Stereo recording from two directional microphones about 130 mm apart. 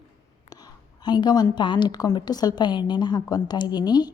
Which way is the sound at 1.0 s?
35° left (ahead or behind).